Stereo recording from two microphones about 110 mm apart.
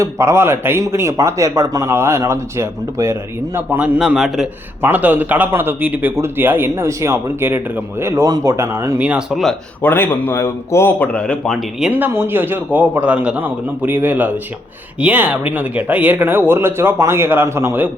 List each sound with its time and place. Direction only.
0.0 s a man's voice: 25° right (ahead or behind)
3.9 s a man's voice: 5° right (ahead or behind)
4.8 s a man's voice: 15° right (ahead or behind)
9.0 s a man's voice: 15° right (ahead or behind)
9.3 s a man's voice: centre (ahead or behind)
9.8 s speech: 20° left (ahead or behind)
11.8 s a man's voice: 15° right (ahead or behind)